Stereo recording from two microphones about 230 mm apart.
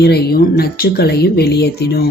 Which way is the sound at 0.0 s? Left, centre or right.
Left.